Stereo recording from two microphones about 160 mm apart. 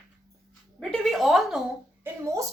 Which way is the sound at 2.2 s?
20° right (ahead or behind).